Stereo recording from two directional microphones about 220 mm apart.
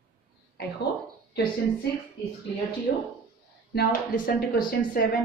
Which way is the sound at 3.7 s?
40° left (ahead or behind).